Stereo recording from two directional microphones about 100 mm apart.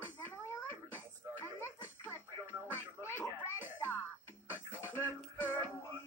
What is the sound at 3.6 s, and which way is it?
Music, 20° left (ahead or behind).